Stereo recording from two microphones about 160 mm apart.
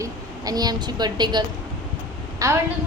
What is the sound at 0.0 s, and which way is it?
A woman's voice, 25° right (ahead or behind).